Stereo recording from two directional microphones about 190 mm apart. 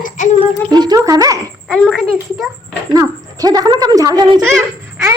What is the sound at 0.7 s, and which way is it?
Speech, 20° right (ahead or behind).